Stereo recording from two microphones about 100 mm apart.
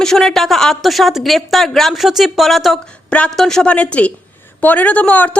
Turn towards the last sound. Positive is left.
turn(degrees=15)  # may be behind; listen again after turning